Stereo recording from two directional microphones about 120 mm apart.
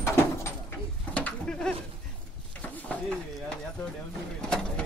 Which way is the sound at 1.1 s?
10° left (ahead or behind).